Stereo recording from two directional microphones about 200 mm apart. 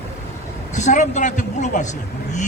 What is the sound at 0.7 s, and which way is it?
A man's voice, 35° left (ahead or behind).